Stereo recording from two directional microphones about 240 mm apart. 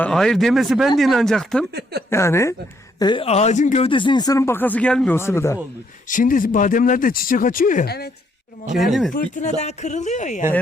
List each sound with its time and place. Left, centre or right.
0.0 s speech: centre
1.7 s speech: right
2.0 s speech: centre
6.1 s speech: left
8.7 s speech: centre
9.1 s speech: left